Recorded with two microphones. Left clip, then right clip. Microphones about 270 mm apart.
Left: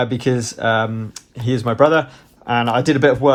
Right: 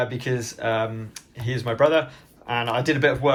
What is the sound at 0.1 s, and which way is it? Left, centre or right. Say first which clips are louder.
Speech: left 8 dB; left.